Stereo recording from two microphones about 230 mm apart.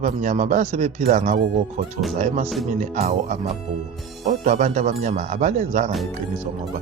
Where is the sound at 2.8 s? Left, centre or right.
Right.